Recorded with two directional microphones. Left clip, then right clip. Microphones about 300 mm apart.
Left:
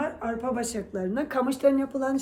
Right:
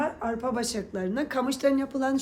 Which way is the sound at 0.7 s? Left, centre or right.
Centre.